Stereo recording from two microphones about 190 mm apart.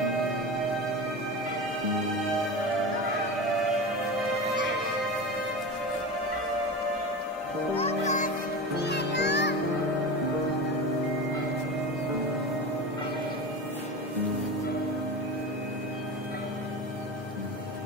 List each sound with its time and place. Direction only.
7.7 s music: 35° left (ahead or behind)
8.7 s music: 60° left (ahead or behind)